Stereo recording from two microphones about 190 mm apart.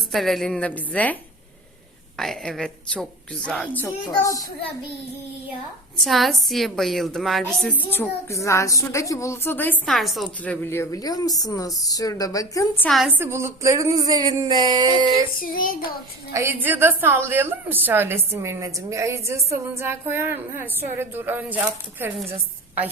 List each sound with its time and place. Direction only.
0.1 s a woman's voice: centre (ahead or behind)
2.1 s a woman's voice: centre (ahead or behind); by 4.4 s 15° left (ahead or behind)
6.1 s a woman's voice: centre (ahead or behind)
13.1 s speech: 15° right (ahead or behind)
15.4 s child singing: 45° left (ahead or behind)
16.3 s a woman's voice: 15° right (ahead or behind)